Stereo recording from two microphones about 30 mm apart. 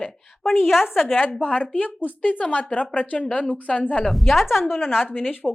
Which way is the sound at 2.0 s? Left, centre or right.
Left.